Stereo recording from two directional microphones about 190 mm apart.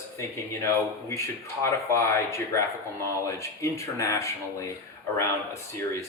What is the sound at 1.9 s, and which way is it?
Speech, 15° left (ahead or behind).